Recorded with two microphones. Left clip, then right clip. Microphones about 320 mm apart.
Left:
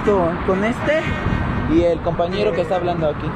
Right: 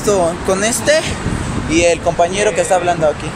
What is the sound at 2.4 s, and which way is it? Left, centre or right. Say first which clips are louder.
Speech: right 5 dB; right.